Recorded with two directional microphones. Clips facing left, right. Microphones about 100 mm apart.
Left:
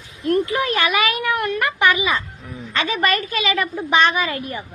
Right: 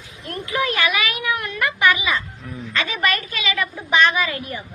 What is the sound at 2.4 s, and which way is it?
Speech, 15° left (ahead or behind).